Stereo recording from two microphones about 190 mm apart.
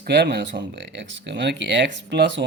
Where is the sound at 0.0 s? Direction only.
60° right (ahead or behind).